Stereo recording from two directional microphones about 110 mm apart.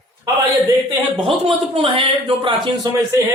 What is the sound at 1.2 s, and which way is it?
Speech, 55° right (ahead or behind).